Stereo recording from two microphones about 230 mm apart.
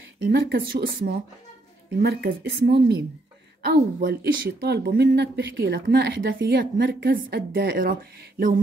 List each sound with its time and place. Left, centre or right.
0.3 s speech: right